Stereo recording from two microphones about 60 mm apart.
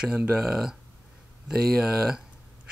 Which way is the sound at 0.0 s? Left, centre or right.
Centre.